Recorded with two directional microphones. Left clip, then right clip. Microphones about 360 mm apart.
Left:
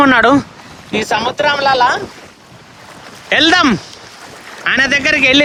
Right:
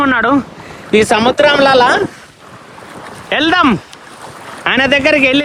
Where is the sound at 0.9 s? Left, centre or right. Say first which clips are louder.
Right 6 dB; centre.